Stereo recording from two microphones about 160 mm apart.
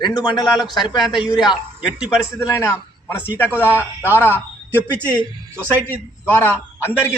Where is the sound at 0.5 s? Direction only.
Centre (ahead or behind).